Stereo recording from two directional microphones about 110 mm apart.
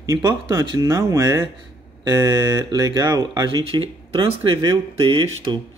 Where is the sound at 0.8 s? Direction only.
25° right (ahead or behind); by 5.6 s 45° right (ahead or behind).